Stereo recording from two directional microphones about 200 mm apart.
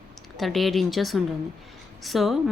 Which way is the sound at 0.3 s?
Centre (ahead or behind).